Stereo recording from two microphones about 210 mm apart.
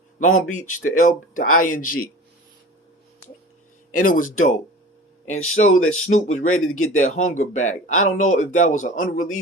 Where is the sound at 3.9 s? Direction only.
40° left (ahead or behind).